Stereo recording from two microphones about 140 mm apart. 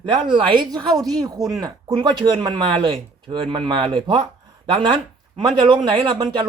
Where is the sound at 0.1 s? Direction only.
35° right (ahead or behind).